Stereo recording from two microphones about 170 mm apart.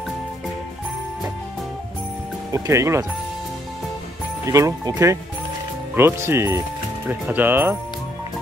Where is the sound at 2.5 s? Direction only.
15° right (ahead or behind).